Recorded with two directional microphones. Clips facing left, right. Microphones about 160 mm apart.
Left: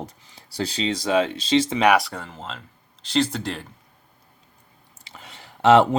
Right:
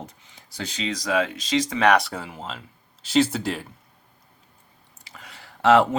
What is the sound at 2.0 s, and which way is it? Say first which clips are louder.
Speech: even; centre (ahead or behind).